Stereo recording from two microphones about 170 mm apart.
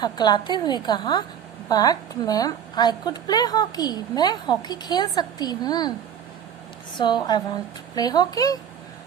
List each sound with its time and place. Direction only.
0.0 s a woman's voice: 25° left (ahead or behind)
6.9 s a woman's voice: 25° left (ahead or behind)